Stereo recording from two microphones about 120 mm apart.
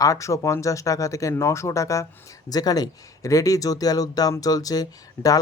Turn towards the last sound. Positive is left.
turn(degrees=30)  # may be behind; listen again after turning